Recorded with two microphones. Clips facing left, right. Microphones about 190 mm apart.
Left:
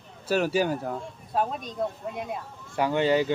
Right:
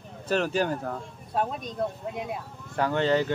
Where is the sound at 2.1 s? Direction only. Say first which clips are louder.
Even; centre (ahead or behind).